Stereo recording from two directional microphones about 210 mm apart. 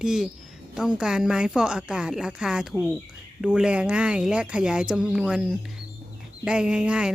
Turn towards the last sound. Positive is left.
turn(degrees=-5)  # may be behind; listen again after turning